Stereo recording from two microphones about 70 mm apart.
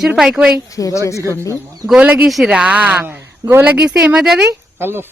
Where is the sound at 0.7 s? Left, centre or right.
Left.